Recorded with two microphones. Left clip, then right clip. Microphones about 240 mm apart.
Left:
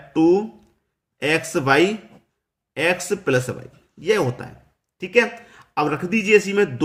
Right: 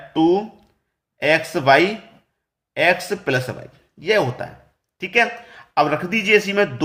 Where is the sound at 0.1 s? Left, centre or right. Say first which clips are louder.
Even; centre.